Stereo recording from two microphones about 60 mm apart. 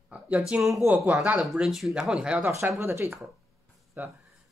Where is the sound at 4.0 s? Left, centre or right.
Right.